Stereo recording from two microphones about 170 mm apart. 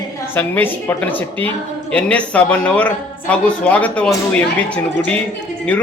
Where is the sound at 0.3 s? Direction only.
10° left (ahead or behind).